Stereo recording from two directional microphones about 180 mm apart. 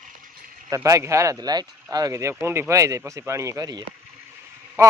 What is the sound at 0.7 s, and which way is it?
Speech, 15° right (ahead or behind).